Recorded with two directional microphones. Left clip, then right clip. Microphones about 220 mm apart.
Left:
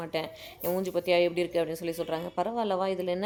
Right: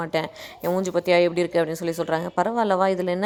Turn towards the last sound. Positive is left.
turn(degrees=-20)  # may be behind; listen again after turning